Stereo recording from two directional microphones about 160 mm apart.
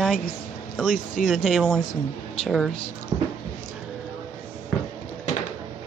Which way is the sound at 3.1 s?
25° right (ahead or behind).